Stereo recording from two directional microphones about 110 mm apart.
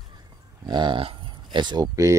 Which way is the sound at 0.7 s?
40° right (ahead or behind).